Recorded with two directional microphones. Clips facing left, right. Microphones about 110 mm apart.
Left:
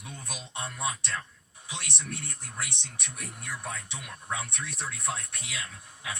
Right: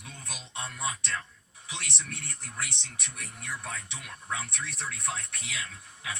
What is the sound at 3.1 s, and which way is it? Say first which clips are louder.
Speech: even; 15° left (ahead or behind).